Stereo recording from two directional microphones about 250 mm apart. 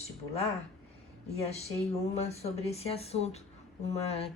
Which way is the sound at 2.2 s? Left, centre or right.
Left.